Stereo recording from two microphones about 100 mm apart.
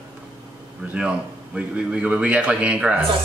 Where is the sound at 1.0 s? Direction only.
10° right (ahead or behind).